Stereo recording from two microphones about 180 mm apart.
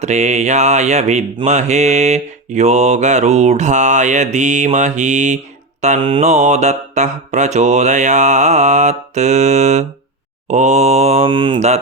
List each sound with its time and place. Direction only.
0.0 s speech: 40° right (ahead or behind)